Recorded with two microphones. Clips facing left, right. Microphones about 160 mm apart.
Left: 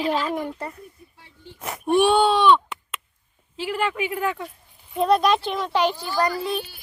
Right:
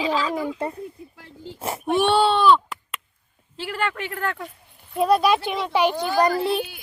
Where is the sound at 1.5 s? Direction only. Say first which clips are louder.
Right 4 dB; 30° right (ahead or behind).